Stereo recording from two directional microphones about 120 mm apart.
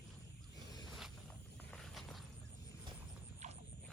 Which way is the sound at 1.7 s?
5° left (ahead or behind).